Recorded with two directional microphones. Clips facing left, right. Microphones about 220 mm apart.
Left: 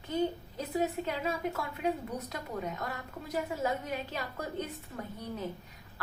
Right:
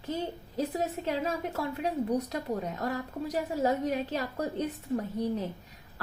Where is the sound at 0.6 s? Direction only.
40° right (ahead or behind).